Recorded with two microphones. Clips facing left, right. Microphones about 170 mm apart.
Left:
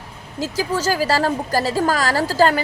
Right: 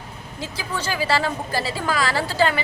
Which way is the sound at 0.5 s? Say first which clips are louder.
Left 7 dB; 40° left (ahead or behind).